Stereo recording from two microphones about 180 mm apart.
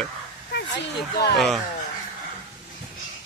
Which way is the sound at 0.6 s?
65° left (ahead or behind).